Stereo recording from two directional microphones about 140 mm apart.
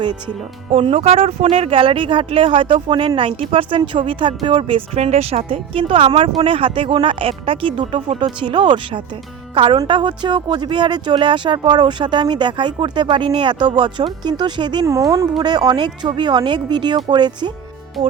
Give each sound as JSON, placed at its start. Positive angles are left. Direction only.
{"t": 0.7, "sound": "speech", "side_deg": -45}
{"t": 4.9, "sound": "speech", "side_deg": -50}
{"t": 14.8, "sound": "speech", "side_deg": -20}